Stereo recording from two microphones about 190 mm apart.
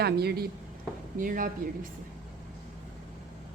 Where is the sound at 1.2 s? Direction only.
45° right (ahead or behind).